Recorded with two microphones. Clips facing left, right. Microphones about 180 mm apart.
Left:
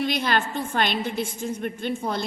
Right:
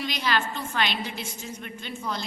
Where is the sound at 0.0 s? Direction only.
55° left (ahead or behind).